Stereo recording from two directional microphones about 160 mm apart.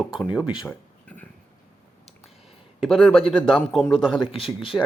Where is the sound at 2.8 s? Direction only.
Centre (ahead or behind).